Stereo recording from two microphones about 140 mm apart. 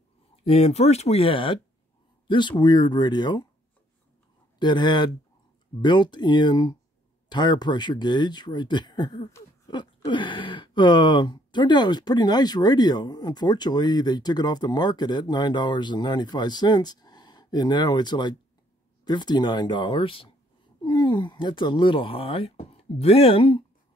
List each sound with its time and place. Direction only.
0.4 s speech: 45° left (ahead or behind)
4.6 s speech: 35° left (ahead or behind)